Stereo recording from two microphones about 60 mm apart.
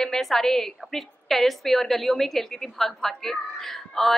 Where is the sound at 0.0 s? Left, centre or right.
Centre.